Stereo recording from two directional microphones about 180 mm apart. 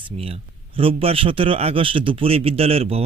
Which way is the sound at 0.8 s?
30° right (ahead or behind).